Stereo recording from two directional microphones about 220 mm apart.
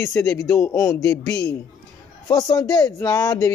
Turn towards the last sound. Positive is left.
turn(degrees=15)  # may be behind; listen again after turning